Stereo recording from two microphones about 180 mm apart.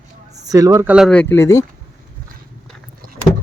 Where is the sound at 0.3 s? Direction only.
20° right (ahead or behind).